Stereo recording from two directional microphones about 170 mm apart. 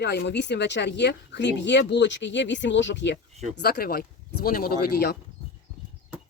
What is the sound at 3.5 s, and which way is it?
Speech, 70° left (ahead or behind).